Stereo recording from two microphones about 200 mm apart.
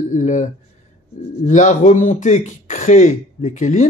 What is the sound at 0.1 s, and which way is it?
Speech, 40° left (ahead or behind).